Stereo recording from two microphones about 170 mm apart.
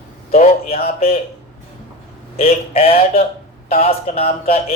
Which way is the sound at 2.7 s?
35° left (ahead or behind).